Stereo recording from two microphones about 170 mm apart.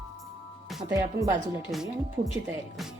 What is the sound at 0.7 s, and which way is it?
Music, 5° right (ahead or behind).